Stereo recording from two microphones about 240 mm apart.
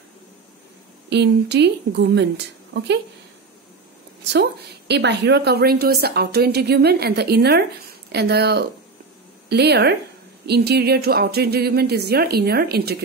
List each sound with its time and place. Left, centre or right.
1.1 s a woman's voice: right
4.2 s a woman's voice: right